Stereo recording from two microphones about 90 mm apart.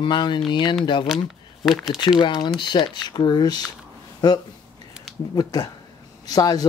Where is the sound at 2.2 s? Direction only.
60° left (ahead or behind).